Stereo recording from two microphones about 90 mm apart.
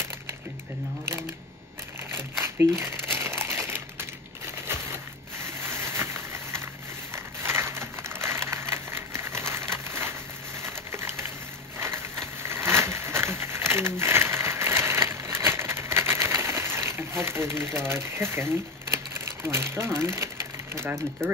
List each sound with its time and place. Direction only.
2.0 s crumpling: 25° right (ahead or behind)
5.4 s a sound: 30° right (ahead or behind)
20.7 s speech: 30° right (ahead or behind)